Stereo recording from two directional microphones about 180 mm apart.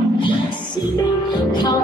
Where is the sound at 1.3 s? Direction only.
25° left (ahead or behind).